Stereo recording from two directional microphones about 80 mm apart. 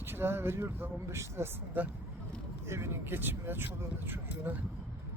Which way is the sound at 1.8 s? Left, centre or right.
Right.